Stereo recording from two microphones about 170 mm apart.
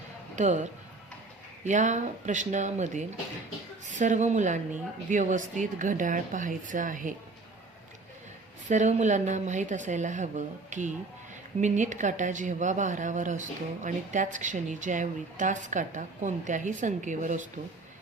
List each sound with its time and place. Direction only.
0.3 s speech: 45° right (ahead or behind)
8.6 s speech: 45° right (ahead or behind)